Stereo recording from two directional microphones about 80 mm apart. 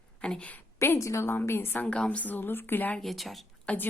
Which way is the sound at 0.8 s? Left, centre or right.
Left.